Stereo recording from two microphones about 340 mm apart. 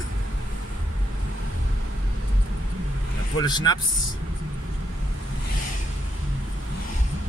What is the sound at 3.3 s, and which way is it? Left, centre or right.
Speech, centre.